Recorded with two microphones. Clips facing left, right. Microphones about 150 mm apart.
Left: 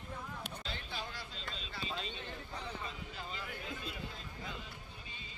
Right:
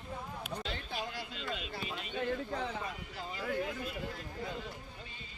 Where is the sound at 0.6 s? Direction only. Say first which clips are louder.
Right 4 dB; 65° right (ahead or behind).